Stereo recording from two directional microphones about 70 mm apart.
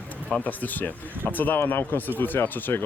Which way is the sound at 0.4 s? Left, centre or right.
Left.